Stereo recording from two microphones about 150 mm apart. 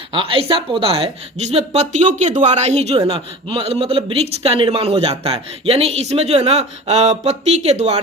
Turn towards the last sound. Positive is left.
turn(degrees=-45)  # may be behind; listen again after turning